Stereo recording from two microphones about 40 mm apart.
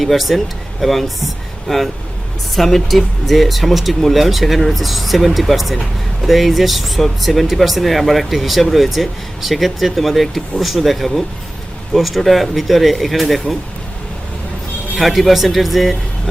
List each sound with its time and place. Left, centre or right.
0.0 s speech: centre
14.9 s speech: centre